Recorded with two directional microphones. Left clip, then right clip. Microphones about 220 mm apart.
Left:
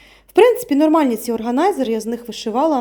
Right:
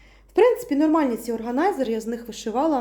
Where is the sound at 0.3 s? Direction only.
40° left (ahead or behind).